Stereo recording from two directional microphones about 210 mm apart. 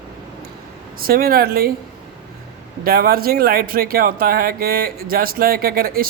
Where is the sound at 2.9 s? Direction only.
45° right (ahead or behind).